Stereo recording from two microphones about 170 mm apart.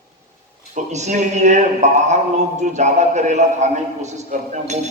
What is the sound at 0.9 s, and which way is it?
Speech, 40° right (ahead or behind).